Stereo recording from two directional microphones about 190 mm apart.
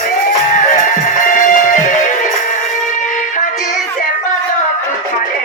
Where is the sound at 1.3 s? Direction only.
45° left (ahead or behind).